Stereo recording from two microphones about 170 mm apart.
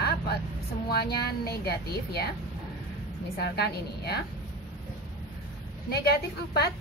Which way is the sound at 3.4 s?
70° left (ahead or behind).